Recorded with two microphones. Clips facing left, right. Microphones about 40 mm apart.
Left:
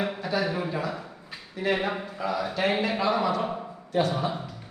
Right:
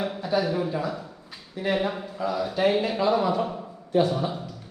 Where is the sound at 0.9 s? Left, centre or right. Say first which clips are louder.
Right 1 dB; centre.